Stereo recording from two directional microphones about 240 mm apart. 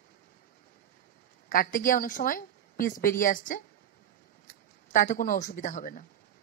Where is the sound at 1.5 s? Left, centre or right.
Left.